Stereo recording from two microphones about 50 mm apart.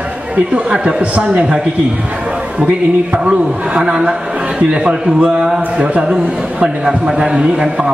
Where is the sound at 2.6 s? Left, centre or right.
Right.